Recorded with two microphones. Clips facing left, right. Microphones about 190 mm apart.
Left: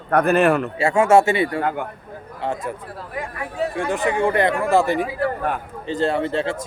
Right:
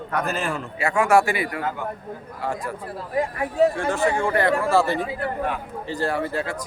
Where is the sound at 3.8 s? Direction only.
15° left (ahead or behind).